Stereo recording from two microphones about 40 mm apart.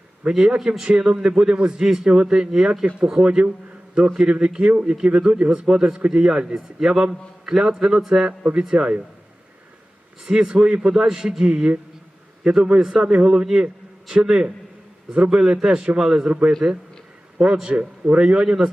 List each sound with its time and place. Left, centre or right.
0.3 s a man's voice: centre
0.9 s a man's voice: right
3.2 s a man's voice: right
10.2 s a man's voice: centre
17.7 s a man's voice: right